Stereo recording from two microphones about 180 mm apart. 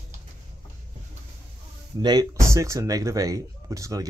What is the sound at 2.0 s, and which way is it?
Speech, 20° right (ahead or behind).